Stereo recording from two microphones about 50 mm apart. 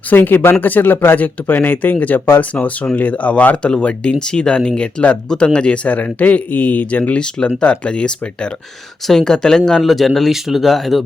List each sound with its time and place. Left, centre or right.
0.3 s speech: left; by 11.0 s centre